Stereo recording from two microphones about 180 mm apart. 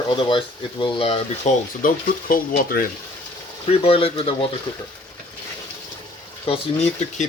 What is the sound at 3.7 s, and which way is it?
Speech, 35° left (ahead or behind).